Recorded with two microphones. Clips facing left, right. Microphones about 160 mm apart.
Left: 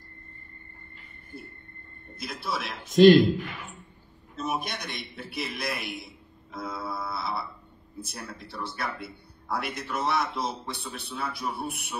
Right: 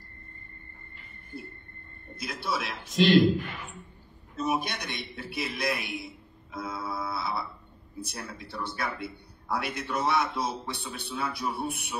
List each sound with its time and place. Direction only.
2.1 s a man's voice: centre (ahead or behind)
2.8 s a man's voice: 45° left (ahead or behind)
4.4 s a man's voice: centre (ahead or behind)